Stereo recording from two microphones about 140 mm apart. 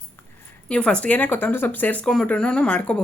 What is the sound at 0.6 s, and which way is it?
Speech, 10° left (ahead or behind).